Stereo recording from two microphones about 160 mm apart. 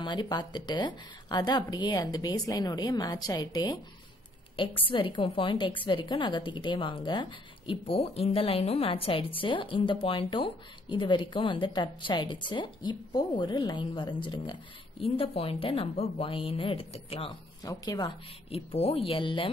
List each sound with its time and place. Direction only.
0.0 s a woman's voice: 30° left (ahead or behind)